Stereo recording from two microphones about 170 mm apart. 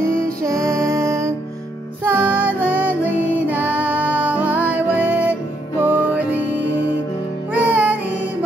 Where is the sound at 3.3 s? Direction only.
10° right (ahead or behind).